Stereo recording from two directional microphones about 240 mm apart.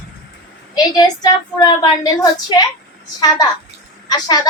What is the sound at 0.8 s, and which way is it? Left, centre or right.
A woman's voice, centre.